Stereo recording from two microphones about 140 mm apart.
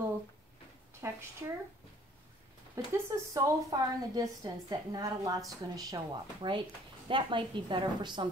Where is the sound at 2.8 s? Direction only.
20° right (ahead or behind).